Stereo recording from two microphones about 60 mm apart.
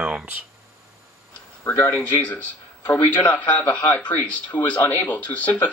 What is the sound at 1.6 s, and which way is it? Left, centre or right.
Speech, left.